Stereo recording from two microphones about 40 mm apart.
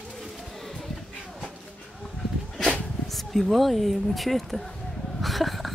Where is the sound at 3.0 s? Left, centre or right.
Centre.